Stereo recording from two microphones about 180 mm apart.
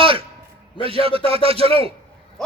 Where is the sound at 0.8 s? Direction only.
30° right (ahead or behind).